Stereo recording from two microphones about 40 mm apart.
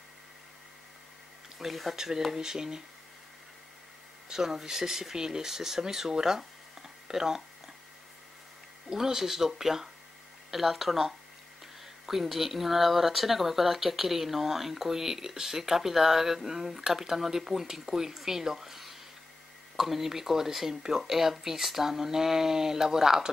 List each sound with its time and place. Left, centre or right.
1.6 s speech: centre
4.3 s speech: centre
7.1 s a sound: centre
8.9 s speech: centre